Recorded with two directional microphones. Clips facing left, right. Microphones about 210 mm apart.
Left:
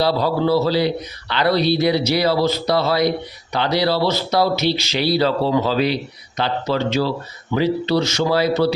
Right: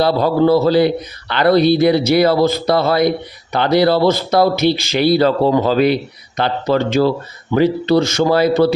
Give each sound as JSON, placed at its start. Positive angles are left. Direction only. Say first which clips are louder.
{"t": 0.0, "sound": "speech", "louder": "right 5 dB", "side_deg": -50}